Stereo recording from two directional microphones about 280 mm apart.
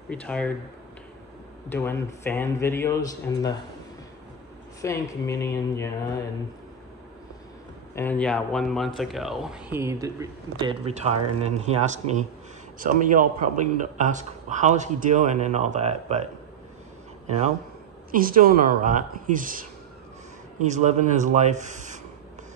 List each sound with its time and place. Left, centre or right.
0.1 s speech: centre
1.7 s speech: centre
4.8 s speech: centre
7.9 s speech: centre; by 11.7 s right
12.7 s speech: right
18.1 s speech: right
20.6 s speech: right